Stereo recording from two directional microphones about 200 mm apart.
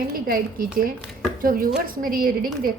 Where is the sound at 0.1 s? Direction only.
45° right (ahead or behind).